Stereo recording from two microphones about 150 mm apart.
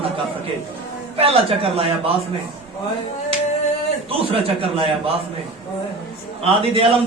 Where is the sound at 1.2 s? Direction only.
40° right (ahead or behind).